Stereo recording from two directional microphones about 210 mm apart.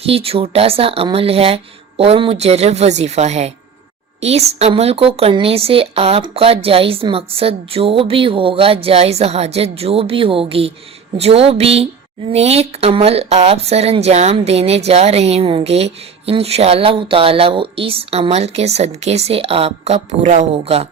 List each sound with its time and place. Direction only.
0.0 s speech: 25° right (ahead or behind)